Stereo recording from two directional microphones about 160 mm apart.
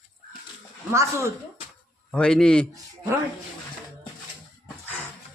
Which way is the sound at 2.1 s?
5° left (ahead or behind).